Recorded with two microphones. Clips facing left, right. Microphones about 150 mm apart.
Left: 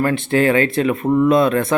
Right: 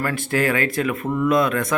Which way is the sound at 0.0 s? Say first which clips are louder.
Left 6 dB; 25° left (ahead or behind).